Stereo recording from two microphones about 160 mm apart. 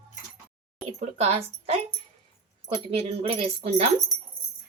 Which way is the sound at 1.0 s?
40° right (ahead or behind).